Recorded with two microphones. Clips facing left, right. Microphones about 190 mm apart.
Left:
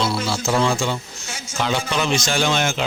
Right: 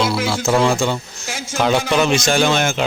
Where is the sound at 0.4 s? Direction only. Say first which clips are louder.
Right 4 dB; 55° right (ahead or behind).